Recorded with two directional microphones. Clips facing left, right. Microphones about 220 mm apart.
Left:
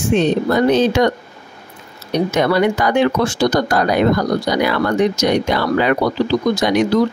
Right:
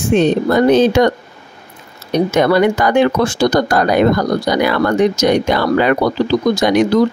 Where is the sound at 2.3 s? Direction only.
50° right (ahead or behind).